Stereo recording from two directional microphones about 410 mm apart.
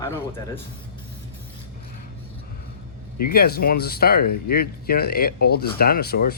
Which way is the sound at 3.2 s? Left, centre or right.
Left.